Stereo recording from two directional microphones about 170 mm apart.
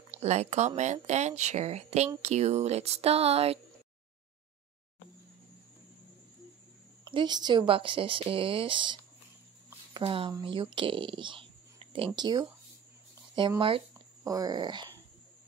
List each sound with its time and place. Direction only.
0.2 s speech: 40° right (ahead or behind)
7.1 s speech: 25° right (ahead or behind)
13.6 s speech: 30° right (ahead or behind)